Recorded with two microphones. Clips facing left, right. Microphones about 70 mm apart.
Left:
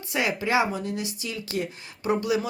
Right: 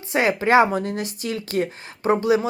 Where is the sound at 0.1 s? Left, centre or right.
Right.